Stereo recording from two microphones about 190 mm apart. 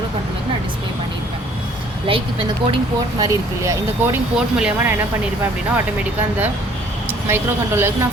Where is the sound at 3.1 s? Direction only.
15° right (ahead or behind).